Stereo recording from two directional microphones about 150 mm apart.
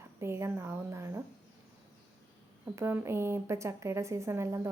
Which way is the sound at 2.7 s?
15° right (ahead or behind).